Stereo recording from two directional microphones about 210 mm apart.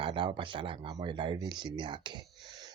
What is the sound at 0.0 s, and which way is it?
Speech, 25° right (ahead or behind).